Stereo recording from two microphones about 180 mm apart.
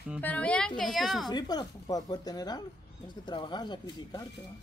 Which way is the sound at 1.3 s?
20° left (ahead or behind).